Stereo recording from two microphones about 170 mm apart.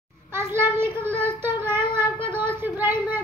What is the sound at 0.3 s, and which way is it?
Child singing, 15° right (ahead or behind).